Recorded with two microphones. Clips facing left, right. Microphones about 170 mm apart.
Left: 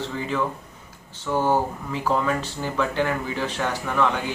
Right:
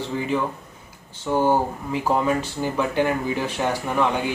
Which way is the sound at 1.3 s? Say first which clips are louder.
Right 2 dB; 20° right (ahead or behind).